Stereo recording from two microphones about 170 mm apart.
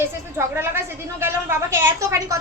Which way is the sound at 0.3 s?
15° right (ahead or behind).